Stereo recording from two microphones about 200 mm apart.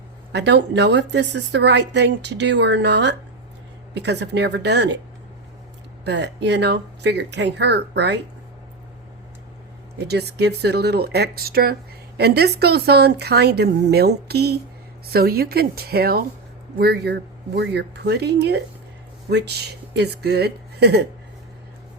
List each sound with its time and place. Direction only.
0.3 s a woman's voice: 60° right (ahead or behind)
6.1 s a woman's voice: 60° right (ahead or behind)
10.1 s a woman's voice: 55° right (ahead or behind)